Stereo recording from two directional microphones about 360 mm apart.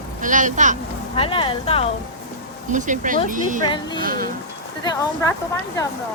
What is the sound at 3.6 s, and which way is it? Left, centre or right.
Speech, centre.